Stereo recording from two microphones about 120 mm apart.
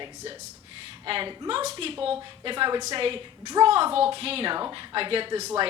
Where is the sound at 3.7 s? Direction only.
50° right (ahead or behind).